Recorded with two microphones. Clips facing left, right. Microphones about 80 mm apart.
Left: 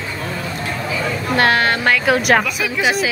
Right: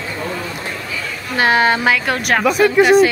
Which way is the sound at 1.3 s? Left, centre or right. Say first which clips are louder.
Right 2 dB; centre.